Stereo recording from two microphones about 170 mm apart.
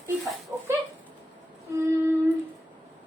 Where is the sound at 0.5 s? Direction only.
15° right (ahead or behind).